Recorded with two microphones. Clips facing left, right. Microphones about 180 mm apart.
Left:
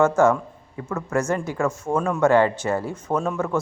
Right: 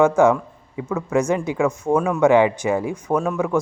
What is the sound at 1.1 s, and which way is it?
A man's voice, 15° right (ahead or behind).